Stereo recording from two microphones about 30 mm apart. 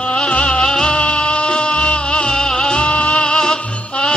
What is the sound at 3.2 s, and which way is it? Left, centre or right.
Music, left.